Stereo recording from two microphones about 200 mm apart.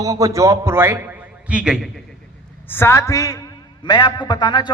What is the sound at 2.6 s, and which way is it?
A woman's voice, 10° left (ahead or behind).